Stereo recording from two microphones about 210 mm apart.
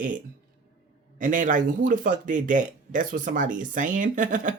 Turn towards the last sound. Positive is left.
turn(degrees=-40)  # may be behind; listen again after turning